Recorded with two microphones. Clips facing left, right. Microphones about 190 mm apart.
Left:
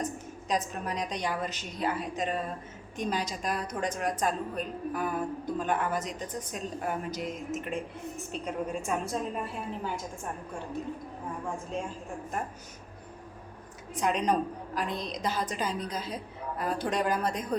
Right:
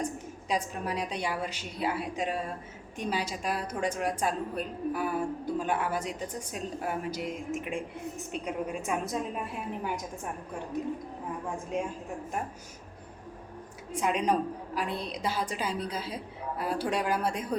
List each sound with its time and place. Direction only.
0.0 s a woman's voice: 10° right (ahead or behind)
13.9 s a woman's voice: 5° right (ahead or behind)